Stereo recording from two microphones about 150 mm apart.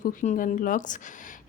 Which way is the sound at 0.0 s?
60° left (ahead or behind).